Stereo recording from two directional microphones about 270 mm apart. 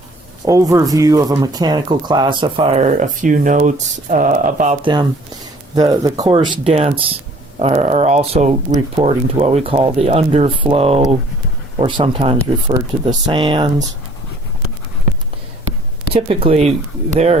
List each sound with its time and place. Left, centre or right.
0.4 s speech: centre
16.1 s speech: centre